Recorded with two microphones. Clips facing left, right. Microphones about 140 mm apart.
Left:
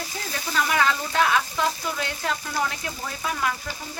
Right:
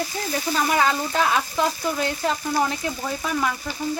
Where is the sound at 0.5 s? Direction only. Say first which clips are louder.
Right 1 dB; 35° right (ahead or behind).